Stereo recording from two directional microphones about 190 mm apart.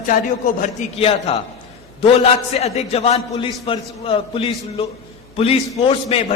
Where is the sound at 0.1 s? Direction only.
45° left (ahead or behind).